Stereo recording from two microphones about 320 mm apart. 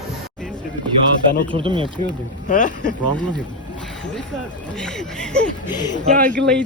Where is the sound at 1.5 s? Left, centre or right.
Centre.